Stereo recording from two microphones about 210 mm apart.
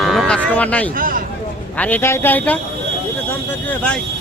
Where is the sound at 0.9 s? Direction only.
40° right (ahead or behind).